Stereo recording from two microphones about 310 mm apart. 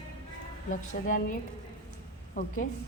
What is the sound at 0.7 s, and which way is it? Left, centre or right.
A woman's voice, left.